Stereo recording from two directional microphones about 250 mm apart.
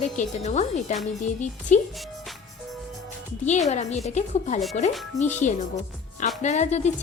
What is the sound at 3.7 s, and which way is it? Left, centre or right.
A woman's voice, left.